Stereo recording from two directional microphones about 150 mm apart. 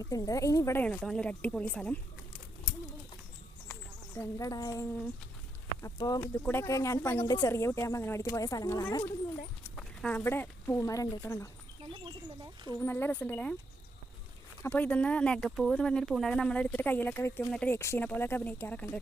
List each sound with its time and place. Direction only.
0.0 s a woman's voice: 20° left (ahead or behind)
0.9 s speech: 5° left (ahead or behind)
3.7 s a sound: 15° left (ahead or behind)
5.8 s a woman's voice: 25° left (ahead or behind)
6.2 s speech: 15° left (ahead or behind)
9.7 s speech: 5° left (ahead or behind)
12.8 s speech: 15° left (ahead or behind)
14.6 s speech: 10° left (ahead or behind)